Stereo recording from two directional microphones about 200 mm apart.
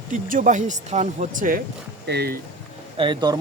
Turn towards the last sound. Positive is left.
turn(degrees=-20)  # may be behind; listen again after turning